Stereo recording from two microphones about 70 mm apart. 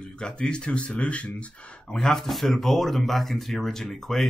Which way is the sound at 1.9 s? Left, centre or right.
Centre.